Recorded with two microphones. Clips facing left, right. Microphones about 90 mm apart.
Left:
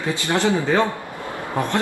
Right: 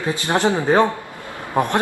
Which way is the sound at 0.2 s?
20° right (ahead or behind).